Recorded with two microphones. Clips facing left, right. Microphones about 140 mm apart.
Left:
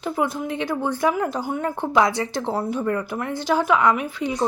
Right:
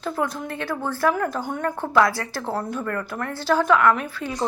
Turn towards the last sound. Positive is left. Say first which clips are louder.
# left 1 dB
turn(degrees=15)  # may be behind; listen again after turning